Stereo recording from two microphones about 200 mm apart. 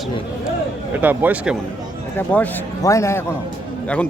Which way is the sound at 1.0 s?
10° right (ahead or behind).